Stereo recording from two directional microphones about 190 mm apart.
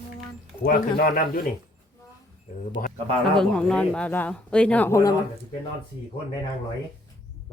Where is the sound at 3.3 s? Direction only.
5° left (ahead or behind).